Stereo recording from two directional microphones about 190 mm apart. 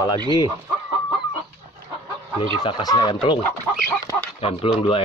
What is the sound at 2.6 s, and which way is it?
Speech, 25° left (ahead or behind).